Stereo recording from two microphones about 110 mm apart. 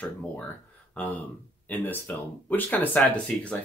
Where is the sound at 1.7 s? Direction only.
15° left (ahead or behind).